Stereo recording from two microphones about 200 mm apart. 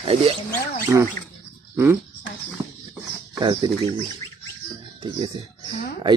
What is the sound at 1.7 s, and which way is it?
Speech, 10° right (ahead or behind).